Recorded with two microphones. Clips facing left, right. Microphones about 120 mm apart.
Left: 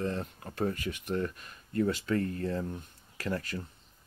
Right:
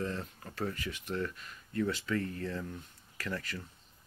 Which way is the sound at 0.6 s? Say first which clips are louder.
Left 5 dB; 45° left (ahead or behind).